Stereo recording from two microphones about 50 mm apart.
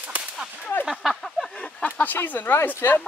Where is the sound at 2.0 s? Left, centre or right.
Left.